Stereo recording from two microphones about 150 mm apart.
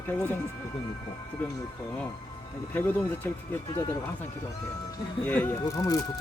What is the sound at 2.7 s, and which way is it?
Speech, 10° left (ahead or behind).